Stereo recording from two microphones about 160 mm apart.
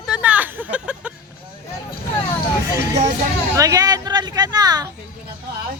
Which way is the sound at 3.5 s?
20° right (ahead or behind).